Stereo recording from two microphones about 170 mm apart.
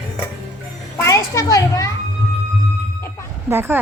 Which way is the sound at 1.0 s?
20° left (ahead or behind).